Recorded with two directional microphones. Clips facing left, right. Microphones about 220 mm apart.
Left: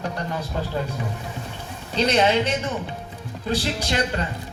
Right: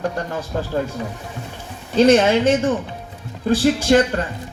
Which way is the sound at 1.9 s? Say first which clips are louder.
Right 6 dB; 50° right (ahead or behind).